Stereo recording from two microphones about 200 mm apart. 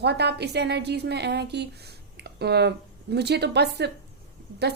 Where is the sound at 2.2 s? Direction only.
55° right (ahead or behind).